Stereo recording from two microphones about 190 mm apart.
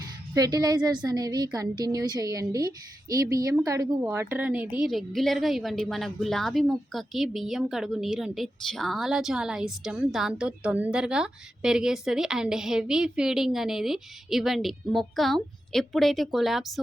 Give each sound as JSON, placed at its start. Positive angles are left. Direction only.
{"t": 0.3, "sound": "a woman's voice", "side_deg": -20}